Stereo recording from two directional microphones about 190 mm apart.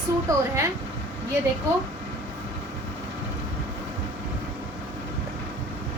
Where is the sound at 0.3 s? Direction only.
15° right (ahead or behind).